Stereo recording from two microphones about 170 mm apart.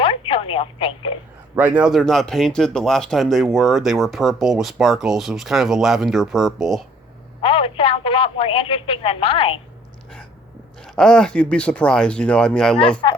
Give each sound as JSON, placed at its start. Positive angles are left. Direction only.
{"t": 0.0, "sound": "telephone", "side_deg": 30}
{"t": 1.5, "sound": "speech", "side_deg": -10}
{"t": 7.4, "sound": "speech", "side_deg": 30}
{"t": 10.8, "sound": "speech", "side_deg": 5}